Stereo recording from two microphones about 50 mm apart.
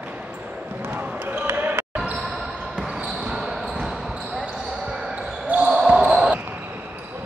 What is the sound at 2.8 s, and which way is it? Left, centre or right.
Basketball bounce, centre.